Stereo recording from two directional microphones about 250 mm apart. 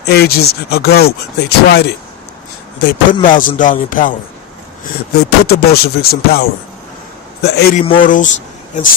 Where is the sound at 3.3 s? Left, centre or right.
Left.